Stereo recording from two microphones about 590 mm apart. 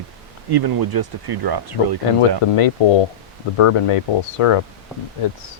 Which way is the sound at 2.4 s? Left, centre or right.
Left.